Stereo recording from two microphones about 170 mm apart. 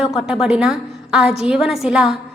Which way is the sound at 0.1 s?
5° right (ahead or behind).